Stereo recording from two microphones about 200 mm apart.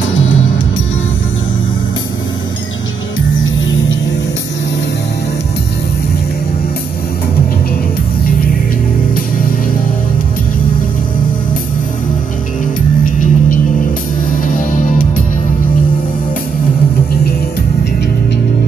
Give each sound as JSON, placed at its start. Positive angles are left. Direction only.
{"t": 13.0, "sound": "music", "side_deg": 45}